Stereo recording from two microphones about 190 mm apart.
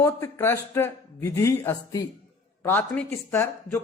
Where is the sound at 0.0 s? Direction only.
15° left (ahead or behind).